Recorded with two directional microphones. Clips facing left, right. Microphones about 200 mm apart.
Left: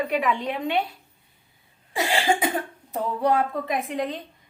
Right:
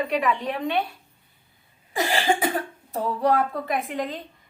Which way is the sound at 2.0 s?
20° left (ahead or behind).